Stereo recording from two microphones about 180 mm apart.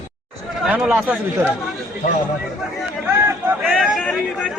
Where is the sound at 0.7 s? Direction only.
5° right (ahead or behind).